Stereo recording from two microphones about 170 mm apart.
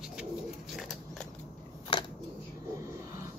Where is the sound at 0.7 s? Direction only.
Centre (ahead or behind).